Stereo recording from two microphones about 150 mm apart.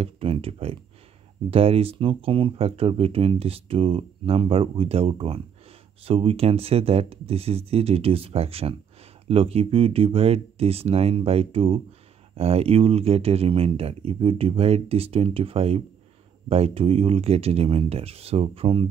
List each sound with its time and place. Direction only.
0.0 s speech: 40° right (ahead or behind)